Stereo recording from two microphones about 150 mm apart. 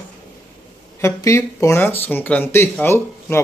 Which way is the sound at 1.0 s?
20° left (ahead or behind).